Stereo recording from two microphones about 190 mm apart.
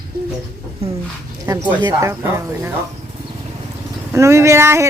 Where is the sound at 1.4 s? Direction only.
20° right (ahead or behind).